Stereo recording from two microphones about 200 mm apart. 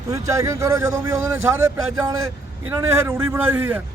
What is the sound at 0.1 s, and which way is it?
A man's voice, 15° right (ahead or behind).